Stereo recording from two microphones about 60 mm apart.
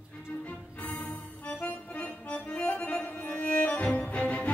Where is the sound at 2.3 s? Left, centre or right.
Centre.